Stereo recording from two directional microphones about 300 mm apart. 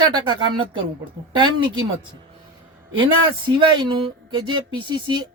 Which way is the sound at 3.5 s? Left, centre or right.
Centre.